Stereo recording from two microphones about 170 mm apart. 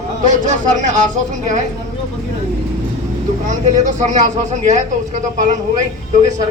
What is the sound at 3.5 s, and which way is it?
Speech, 45° right (ahead or behind).